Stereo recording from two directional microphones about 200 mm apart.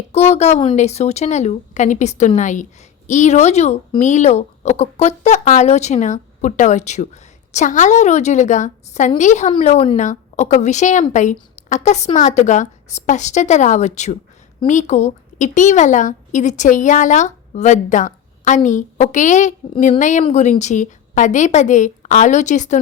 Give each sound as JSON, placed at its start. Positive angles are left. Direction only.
{"t": 0.1, "sound": "speech", "side_deg": 30}